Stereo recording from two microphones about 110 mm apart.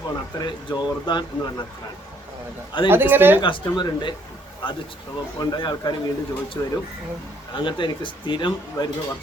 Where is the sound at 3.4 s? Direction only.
45° left (ahead or behind).